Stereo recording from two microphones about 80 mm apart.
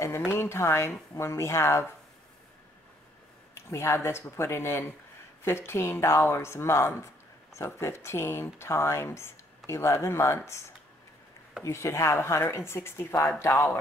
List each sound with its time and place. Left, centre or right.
0.0 s a sound: left
0.3 s speech: left
3.7 s speech: left
11.6 s speech: left